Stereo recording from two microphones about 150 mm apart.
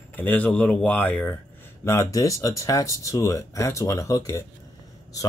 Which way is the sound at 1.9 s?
20° left (ahead or behind).